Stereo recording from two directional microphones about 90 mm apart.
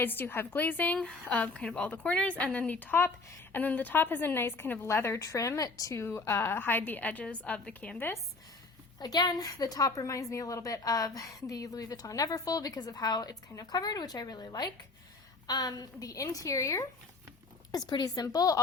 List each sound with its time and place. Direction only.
0.0 s a woman's voice: 25° left (ahead or behind)
0.9 s a woman's voice: 5° left (ahead or behind); by 8.2 s 20° left (ahead or behind)
9.0 s a woman's voice: 45° left (ahead or behind)
17.7 s a woman's voice: 50° left (ahead or behind)